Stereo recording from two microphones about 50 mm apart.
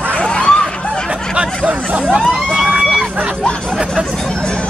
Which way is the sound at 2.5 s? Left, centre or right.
Centre.